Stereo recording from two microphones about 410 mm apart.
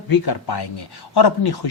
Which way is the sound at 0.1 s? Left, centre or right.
Left.